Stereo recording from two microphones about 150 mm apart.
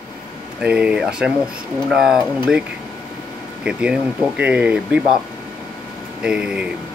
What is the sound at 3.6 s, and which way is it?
Speech, 5° right (ahead or behind).